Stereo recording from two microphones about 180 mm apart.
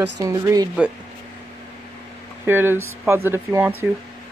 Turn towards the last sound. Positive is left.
turn(degrees=-10)  # may be behind; listen again after turning